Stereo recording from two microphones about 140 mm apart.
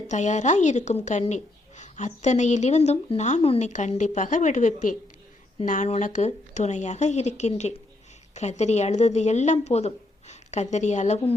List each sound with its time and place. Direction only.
0.1 s a woman's voice: 55° left (ahead or behind)
3.4 s a woman's voice: 45° left (ahead or behind)
3.7 s a woman's voice: 60° left (ahead or behind)